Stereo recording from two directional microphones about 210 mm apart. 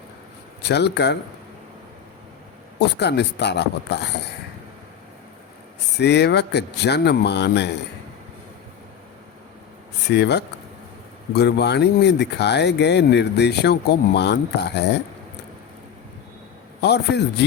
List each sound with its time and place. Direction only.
0.6 s speech: 50° left (ahead or behind)
2.7 s speech: 55° left (ahead or behind)
6.0 s speech: 55° left (ahead or behind)
10.1 s speech: 55° left (ahead or behind)
16.8 s speech: 50° left (ahead or behind)